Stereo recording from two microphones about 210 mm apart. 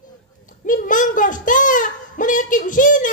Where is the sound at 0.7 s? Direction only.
40° left (ahead or behind).